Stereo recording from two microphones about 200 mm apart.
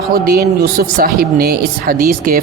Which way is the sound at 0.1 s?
50° right (ahead or behind).